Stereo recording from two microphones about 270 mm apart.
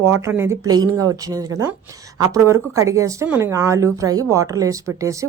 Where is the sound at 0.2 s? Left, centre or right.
Centre.